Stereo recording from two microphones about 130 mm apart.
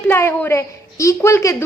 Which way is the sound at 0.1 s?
20° left (ahead or behind).